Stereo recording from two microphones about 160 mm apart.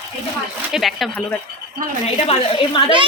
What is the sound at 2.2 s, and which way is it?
Speech, 35° left (ahead or behind).